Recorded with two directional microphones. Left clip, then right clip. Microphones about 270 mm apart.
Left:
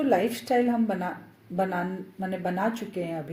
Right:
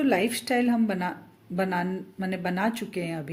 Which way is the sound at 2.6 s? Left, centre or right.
Right.